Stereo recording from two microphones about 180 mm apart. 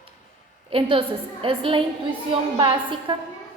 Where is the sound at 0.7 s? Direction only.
30° right (ahead or behind).